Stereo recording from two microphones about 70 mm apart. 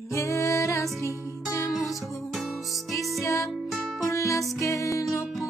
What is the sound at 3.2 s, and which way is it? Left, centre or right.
Music, left.